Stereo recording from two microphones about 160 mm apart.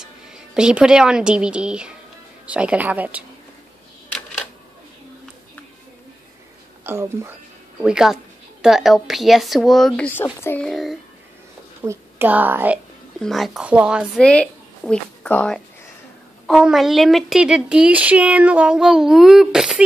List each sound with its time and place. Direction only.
0.0 s a woman's voice: 5° right (ahead or behind)
6.8 s speech: 15° right (ahead or behind)
7.8 s a child's voice: 5° right (ahead or behind); by 10.7 s 10° left (ahead or behind)
10.7 s speech: centre (ahead or behind)
11.8 s a woman's voice: 15° right (ahead or behind)
13.2 s speech: centre (ahead or behind)
14.2 s a woman's voice: 5° left (ahead or behind)